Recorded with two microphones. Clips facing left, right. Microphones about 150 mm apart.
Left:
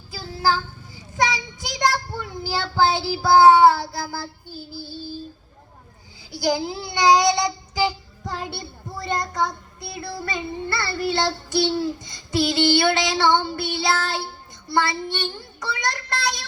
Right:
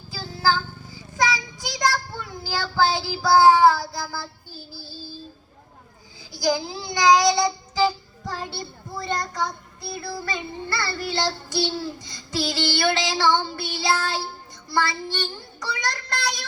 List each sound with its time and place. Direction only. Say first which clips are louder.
1.2 s child singing: left 1 dB; 25° left (ahead or behind)
6.3 s a child's voice: left 1 dB; 25° left (ahead or behind)
13.1 s child singing: left 2 dB; 20° left (ahead or behind)